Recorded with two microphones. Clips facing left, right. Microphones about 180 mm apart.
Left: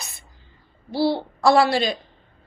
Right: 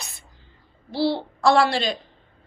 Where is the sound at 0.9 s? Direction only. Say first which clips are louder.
Left 2 dB; 50° left (ahead or behind).